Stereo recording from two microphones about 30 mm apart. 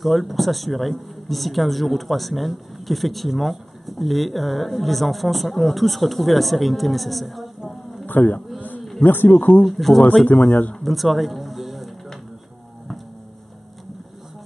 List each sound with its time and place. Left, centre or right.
0.0 s speech: centre
8.1 s a man's voice: left
9.0 s speech: left
9.7 s speech: centre
10.8 s music: centre